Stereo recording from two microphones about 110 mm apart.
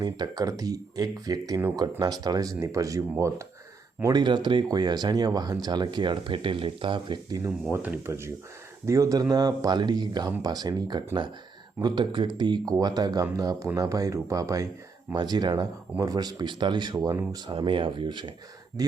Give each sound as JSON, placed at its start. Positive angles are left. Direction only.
{"t": 0.0, "sound": "speech", "side_deg": -35}
{"t": 4.1, "sound": "speech", "side_deg": -45}
{"t": 7.7, "sound": "speech", "side_deg": -15}
{"t": 8.0, "sound": "speech", "side_deg": -25}